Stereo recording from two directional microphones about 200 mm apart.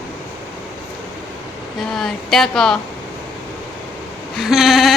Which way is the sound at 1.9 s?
Centre (ahead or behind).